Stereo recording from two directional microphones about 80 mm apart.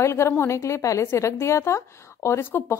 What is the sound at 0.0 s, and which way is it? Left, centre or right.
Speech, left.